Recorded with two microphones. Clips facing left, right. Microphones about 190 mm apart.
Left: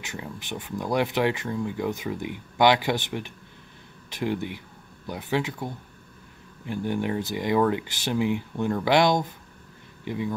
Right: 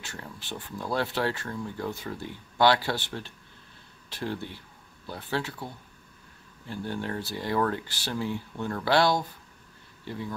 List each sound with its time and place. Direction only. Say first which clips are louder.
0.0 s speech: left 5 dB; 15° left (ahead or behind)